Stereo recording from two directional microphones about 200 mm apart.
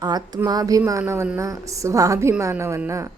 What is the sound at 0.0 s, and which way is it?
A woman's voice, 20° right (ahead or behind).